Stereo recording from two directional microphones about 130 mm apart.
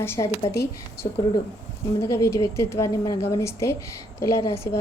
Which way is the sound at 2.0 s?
20° left (ahead or behind).